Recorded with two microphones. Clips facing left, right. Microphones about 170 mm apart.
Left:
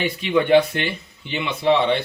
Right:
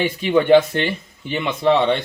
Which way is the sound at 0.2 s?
40° right (ahead or behind).